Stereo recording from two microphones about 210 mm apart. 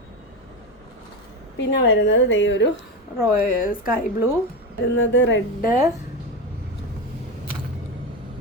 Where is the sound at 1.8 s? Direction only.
60° left (ahead or behind).